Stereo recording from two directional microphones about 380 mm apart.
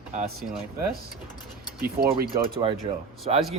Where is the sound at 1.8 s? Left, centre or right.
Right.